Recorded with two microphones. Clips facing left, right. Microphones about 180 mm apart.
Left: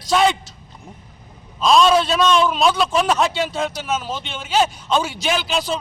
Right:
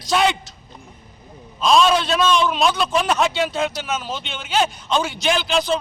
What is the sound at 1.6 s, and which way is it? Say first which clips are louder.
A man's voice: left 2 dB; centre (ahead or behind).